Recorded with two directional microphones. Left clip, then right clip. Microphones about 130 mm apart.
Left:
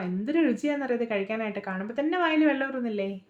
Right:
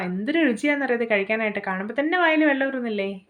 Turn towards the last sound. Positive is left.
turn(degrees=-15)  # may be behind; listen again after turning